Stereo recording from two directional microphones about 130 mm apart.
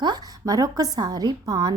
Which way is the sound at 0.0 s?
30° right (ahead or behind).